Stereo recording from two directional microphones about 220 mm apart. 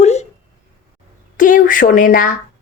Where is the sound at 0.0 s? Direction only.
30° left (ahead or behind).